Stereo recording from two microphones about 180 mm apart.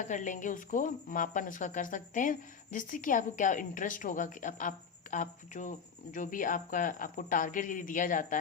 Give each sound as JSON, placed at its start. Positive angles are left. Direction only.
{"t": 0.0, "sound": "speech", "side_deg": 45}